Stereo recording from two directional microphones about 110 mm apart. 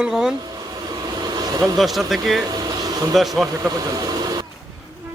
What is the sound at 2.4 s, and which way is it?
Vehicle, 35° right (ahead or behind).